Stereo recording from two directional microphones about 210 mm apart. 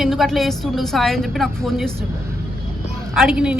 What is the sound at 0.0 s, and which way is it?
A woman's voice, centre (ahead or behind).